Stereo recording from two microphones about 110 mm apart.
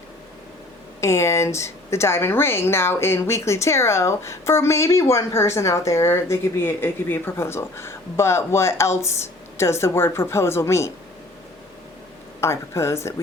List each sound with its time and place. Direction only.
1.0 s speech: 25° left (ahead or behind)
12.4 s speech: 25° left (ahead or behind)